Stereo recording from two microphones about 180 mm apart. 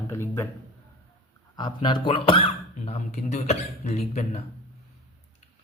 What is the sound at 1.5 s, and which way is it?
Speech, 25° left (ahead or behind).